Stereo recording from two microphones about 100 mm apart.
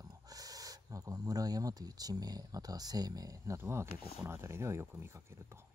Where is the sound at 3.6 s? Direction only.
25° right (ahead or behind).